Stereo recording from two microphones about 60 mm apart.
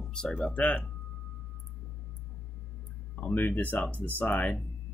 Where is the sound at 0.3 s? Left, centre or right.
Left.